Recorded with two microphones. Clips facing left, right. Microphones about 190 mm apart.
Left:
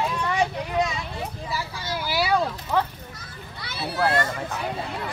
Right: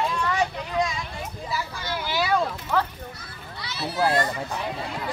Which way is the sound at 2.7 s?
15° left (ahead or behind).